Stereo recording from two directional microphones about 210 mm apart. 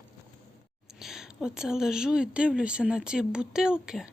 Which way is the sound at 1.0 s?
Centre (ahead or behind).